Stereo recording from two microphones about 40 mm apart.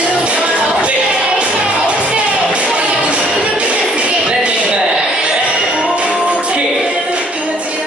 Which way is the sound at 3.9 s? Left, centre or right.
Right.